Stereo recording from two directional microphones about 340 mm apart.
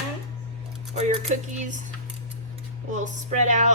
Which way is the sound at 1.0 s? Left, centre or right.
Centre.